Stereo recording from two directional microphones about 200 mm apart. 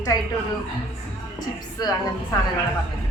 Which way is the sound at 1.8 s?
20° left (ahead or behind).